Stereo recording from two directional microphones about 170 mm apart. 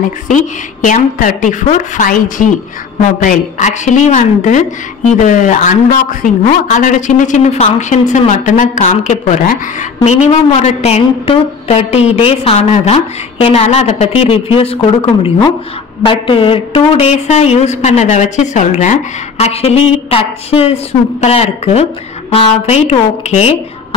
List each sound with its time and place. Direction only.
0.3 s a man's voice: 50° left (ahead or behind)
10.0 s a woman's voice: 40° left (ahead or behind)